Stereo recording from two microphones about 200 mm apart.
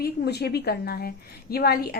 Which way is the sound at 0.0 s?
55° left (ahead or behind).